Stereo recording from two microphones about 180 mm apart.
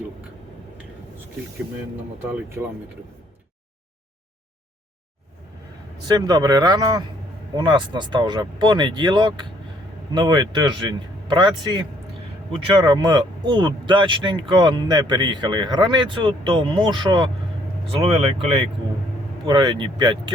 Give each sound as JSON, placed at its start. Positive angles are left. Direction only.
{"t": 2.2, "sound": "speech", "side_deg": -15}
{"t": 6.1, "sound": "speech", "side_deg": -20}